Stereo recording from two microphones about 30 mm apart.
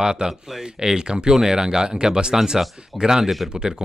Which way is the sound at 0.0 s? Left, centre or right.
Right.